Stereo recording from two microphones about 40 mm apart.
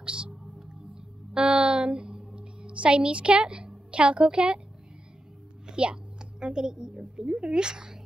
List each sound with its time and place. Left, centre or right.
0.0 s music: right
1.3 s a sound: right
3.9 s a woman's voice: right
5.7 s a woman's voice: right